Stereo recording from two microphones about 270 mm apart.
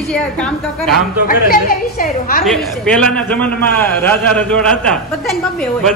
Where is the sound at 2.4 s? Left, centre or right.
Centre.